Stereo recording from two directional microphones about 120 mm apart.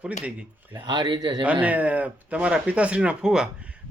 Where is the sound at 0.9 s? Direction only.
40° right (ahead or behind).